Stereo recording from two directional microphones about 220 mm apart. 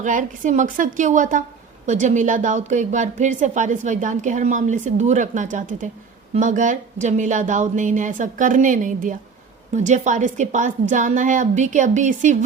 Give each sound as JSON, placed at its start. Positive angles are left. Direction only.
{"t": 0.0, "sound": "a woman's voice", "side_deg": -35}